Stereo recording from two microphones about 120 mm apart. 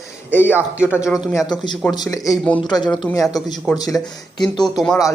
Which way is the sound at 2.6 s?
35° left (ahead or behind).